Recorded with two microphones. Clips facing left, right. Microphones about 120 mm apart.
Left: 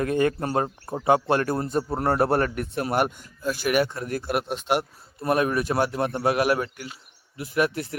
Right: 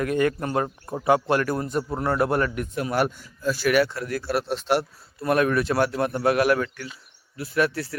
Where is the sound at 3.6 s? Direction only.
15° left (ahead or behind).